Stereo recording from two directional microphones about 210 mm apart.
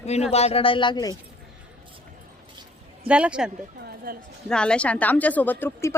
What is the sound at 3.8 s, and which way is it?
Speech, 50° right (ahead or behind).